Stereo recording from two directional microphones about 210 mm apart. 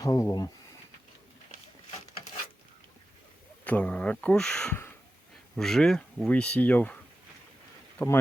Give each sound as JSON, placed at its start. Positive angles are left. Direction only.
{"t": 0.0, "sound": "speech", "side_deg": 15}
{"t": 3.6, "sound": "speech", "side_deg": 5}
{"t": 7.9, "sound": "speech", "side_deg": 10}